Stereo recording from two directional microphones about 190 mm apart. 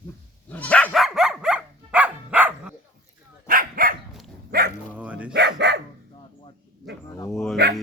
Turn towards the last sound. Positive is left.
turn(degrees=0)  # may be behind; listen again after turning